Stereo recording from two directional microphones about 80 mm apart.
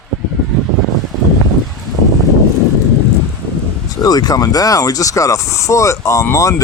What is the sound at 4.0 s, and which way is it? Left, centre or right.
Speech, left.